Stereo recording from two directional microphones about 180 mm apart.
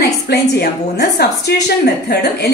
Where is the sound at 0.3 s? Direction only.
70° left (ahead or behind).